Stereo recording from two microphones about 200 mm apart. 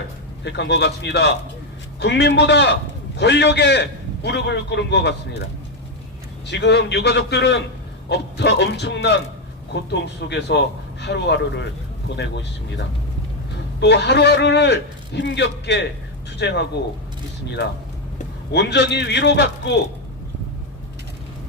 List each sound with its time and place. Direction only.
0.4 s a man's voice: 60° left (ahead or behind)
6.5 s a man's voice: 60° left (ahead or behind)
13.7 s a man's voice: 55° left (ahead or behind)
18.5 s a man's voice: 60° left (ahead or behind)